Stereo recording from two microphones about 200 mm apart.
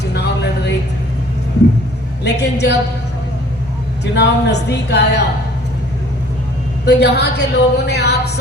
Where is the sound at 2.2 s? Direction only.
55° left (ahead or behind).